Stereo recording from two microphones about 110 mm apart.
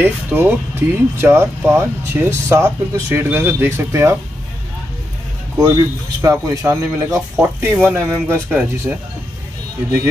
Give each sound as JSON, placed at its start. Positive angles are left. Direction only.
{"t": 0.0, "sound": "speech", "side_deg": -15}
{"t": 6.2, "sound": "speech", "side_deg": -25}